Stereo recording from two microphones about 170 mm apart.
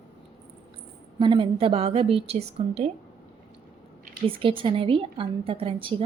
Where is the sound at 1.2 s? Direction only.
30° right (ahead or behind).